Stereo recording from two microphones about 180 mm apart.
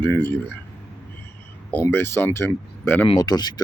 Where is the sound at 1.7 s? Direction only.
10° left (ahead or behind).